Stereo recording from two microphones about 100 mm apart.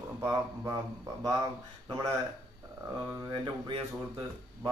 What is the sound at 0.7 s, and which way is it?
A man's voice, 40° right (ahead or behind).